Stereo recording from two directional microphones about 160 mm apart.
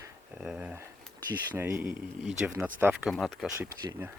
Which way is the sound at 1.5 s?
20° right (ahead or behind).